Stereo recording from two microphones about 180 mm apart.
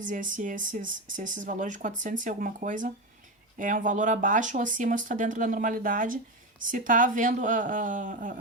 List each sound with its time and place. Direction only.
0.0 s speech: 45° right (ahead or behind)